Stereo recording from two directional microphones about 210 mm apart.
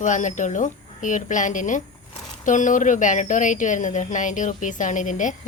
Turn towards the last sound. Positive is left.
turn(degrees=35)  # may be behind; listen again after turning